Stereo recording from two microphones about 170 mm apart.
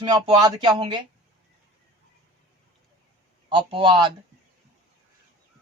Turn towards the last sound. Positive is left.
turn(degrees=-25)  # may be behind; listen again after turning